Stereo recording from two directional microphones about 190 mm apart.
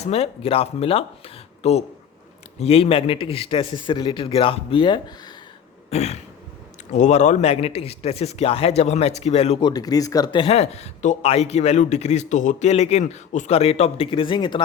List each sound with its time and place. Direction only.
0.0 s a man's voice: 35° left (ahead or behind)
5.9 s speech: 35° left (ahead or behind)